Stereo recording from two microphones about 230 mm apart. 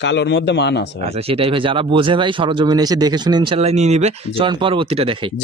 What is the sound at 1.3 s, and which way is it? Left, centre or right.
Speech, right.